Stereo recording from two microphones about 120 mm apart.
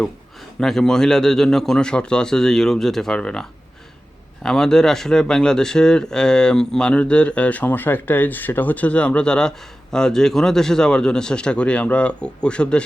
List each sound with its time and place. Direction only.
0.6 s a man's voice: 5° left (ahead or behind)
4.4 s speech: 5° left (ahead or behind)